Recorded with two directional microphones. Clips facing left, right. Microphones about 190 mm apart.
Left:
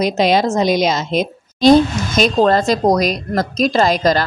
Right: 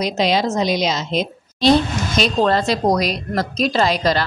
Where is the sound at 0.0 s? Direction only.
50° left (ahead or behind).